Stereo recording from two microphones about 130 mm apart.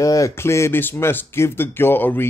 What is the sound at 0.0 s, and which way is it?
Speech, 25° left (ahead or behind).